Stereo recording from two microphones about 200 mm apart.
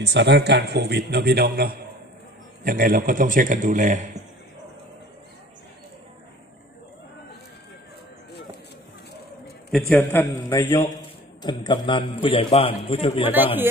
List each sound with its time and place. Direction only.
0.0 s a man's voice: 55° right (ahead or behind); by 4.2 s 40° right (ahead or behind)
9.9 s a man's voice: 10° left (ahead or behind); by 13.2 s 25° left (ahead or behind)
13.2 s speech: 10° right (ahead or behind)